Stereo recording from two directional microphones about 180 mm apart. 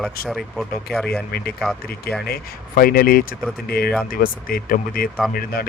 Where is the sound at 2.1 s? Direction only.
60° left (ahead or behind).